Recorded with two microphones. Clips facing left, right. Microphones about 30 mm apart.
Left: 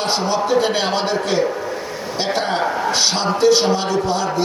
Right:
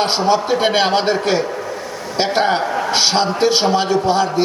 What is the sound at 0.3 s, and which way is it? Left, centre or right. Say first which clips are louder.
Speech: right 1 dB; right.